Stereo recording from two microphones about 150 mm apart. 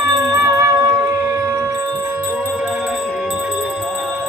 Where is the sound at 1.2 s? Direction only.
20° right (ahead or behind).